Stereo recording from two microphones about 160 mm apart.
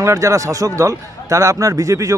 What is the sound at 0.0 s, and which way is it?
A man's voice, 20° right (ahead or behind).